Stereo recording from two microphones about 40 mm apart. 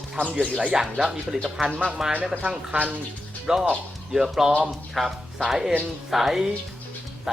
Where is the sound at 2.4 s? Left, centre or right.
Right.